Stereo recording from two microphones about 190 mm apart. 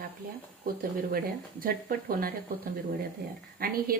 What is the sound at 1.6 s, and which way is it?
Speech, 50° right (ahead or behind).